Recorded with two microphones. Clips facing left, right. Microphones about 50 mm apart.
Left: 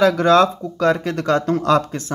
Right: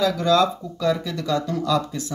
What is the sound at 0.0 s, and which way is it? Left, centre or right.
Speech, left.